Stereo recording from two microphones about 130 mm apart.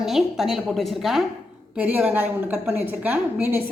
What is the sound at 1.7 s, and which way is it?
A woman's voice, 10° right (ahead or behind).